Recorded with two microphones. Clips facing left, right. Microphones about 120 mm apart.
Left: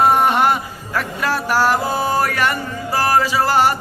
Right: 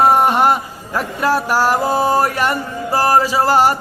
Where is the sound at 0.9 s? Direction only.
15° right (ahead or behind).